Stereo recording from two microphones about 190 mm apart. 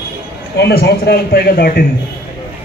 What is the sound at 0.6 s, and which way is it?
A man's voice, 55° left (ahead or behind).